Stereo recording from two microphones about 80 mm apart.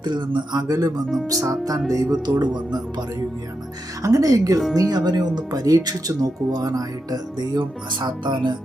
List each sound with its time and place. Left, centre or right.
0.0 s a woman's voice: right
4.0 s a woman's voice: right